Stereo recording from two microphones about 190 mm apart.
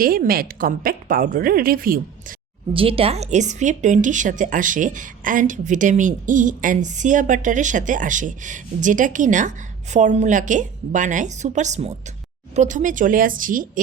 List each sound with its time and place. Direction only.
0.0 s a woman's voice: 50° right (ahead or behind)
2.7 s a woman's voice: 30° right (ahead or behind); by 13.7 s 45° right (ahead or behind)